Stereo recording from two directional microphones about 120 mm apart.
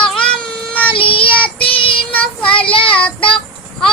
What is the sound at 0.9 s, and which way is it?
Child singing, 45° left (ahead or behind).